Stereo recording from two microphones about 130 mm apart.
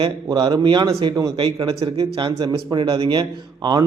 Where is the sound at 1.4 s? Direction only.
40° right (ahead or behind).